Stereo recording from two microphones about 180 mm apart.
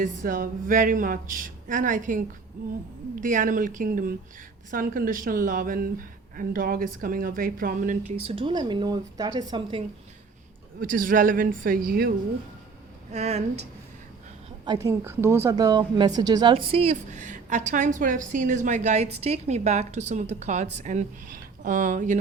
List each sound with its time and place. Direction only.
0.0 s speech: 50° right (ahead or behind); by 9.8 s 25° right (ahead or behind)
10.8 s speech: 50° right (ahead or behind)
13.1 s a woman's voice: 40° right (ahead or behind)
14.6 s a woman's voice: 20° right (ahead or behind); by 22.2 s 45° right (ahead or behind)